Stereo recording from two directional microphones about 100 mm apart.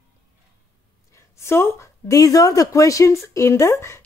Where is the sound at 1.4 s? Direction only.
25° left (ahead or behind).